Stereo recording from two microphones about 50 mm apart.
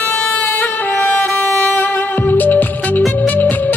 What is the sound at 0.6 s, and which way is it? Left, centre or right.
Music, left.